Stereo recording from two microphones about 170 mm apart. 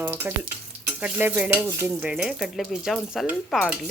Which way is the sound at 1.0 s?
10° right (ahead or behind).